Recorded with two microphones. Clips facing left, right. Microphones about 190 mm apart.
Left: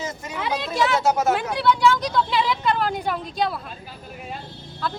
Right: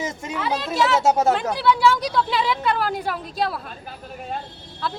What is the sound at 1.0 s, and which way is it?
Speech, 30° right (ahead or behind).